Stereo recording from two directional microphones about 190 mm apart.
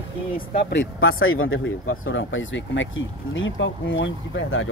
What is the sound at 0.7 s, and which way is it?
Speech, 80° left.